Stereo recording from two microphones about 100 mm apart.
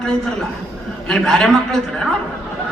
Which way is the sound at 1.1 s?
5° left (ahead or behind).